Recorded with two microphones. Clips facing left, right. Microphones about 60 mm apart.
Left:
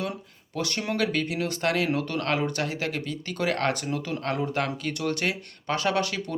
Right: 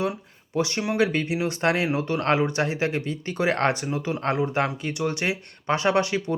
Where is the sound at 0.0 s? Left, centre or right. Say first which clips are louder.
Right 5 dB; right.